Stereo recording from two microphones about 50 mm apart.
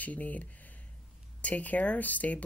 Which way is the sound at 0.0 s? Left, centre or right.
Left.